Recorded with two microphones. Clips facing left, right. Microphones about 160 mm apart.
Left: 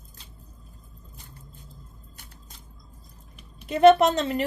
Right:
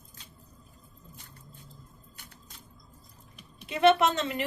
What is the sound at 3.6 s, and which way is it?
Speech, 40° left (ahead or behind).